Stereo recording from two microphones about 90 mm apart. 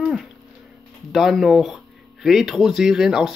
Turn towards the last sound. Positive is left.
turn(degrees=-5)  # may be behind; listen again after turning